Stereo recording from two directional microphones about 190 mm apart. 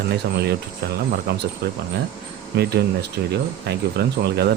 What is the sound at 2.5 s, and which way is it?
Speech, 60° right (ahead or behind).